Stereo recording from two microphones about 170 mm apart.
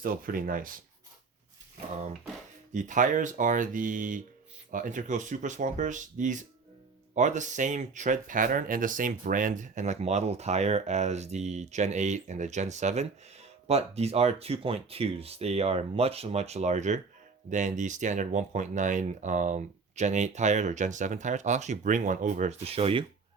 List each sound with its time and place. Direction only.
0.0 s speech: 55° right (ahead or behind)
2.7 s speech: 50° right (ahead or behind)